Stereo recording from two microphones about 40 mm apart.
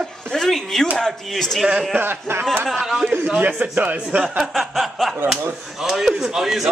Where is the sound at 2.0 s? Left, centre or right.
Right.